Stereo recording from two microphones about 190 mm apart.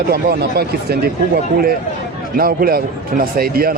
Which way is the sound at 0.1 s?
55° right (ahead or behind).